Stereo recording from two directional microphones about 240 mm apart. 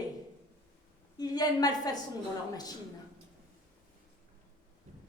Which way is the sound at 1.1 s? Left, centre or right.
Centre.